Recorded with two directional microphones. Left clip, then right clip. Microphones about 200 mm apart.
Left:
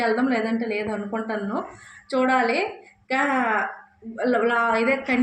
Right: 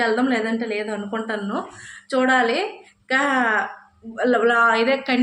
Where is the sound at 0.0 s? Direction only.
5° left (ahead or behind).